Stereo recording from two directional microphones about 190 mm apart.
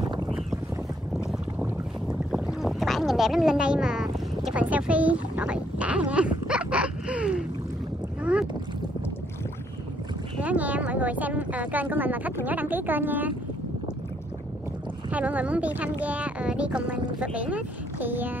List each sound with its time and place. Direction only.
1.6 s boat: 5° right (ahead or behind)
10.4 s speech: 10° right (ahead or behind)
15.0 s speech: 10° right (ahead or behind)